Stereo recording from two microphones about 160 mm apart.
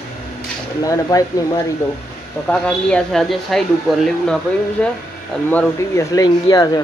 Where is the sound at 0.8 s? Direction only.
20° left (ahead or behind).